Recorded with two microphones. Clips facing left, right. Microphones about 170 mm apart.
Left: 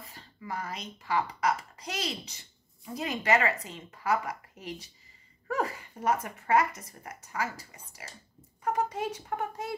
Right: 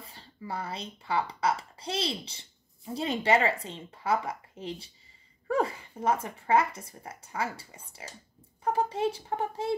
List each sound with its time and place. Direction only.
0.0 s speech: 30° right (ahead or behind)